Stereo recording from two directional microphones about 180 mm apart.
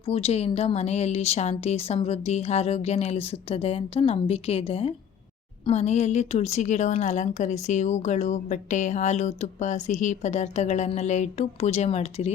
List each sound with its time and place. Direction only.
0.0 s a woman's voice: 35° left (ahead or behind)